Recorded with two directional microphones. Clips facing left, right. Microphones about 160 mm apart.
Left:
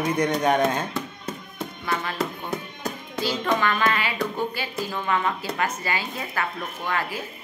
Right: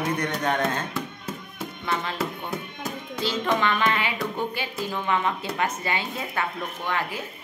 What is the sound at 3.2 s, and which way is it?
A woman's voice, 20° right (ahead or behind).